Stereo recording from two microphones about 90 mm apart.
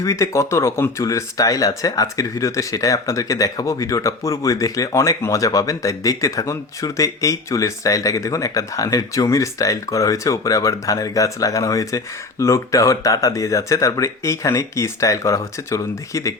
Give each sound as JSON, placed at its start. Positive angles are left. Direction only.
{"t": 0.0, "sound": "speech", "side_deg": 35}